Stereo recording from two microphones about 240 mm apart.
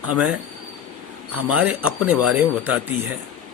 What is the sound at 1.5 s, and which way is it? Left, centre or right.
Speech, centre.